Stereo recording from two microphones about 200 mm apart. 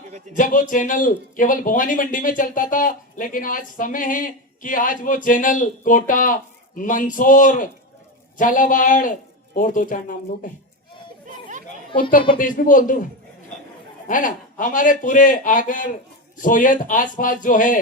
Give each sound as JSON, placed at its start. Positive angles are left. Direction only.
{"t": 0.3, "sound": "speech", "side_deg": 40}
{"t": 12.4, "sound": "speech", "side_deg": 40}
{"t": 14.1, "sound": "speech", "side_deg": 40}